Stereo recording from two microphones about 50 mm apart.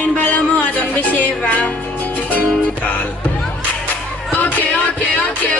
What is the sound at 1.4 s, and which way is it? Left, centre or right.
Music, left.